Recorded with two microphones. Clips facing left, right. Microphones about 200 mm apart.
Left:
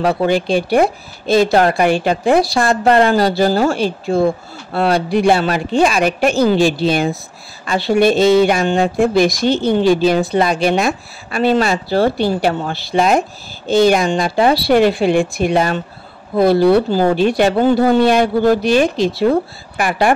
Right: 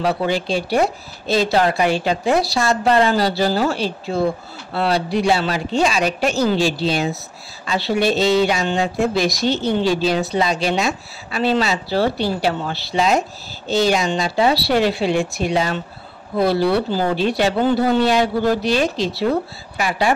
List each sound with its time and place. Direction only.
0.0 s a woman's voice: 50° left (ahead or behind)